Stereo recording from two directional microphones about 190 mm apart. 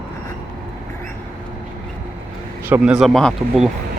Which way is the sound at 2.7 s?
5° right (ahead or behind).